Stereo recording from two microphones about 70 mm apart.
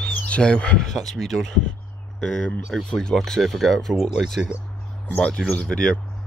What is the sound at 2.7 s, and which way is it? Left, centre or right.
Speech, centre.